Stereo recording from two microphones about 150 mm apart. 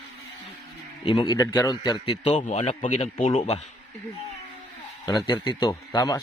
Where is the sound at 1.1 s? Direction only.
30° left (ahead or behind).